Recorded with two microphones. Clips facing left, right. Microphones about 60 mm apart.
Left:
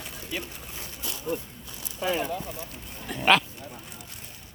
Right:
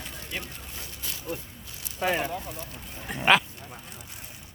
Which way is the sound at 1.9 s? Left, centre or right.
Right.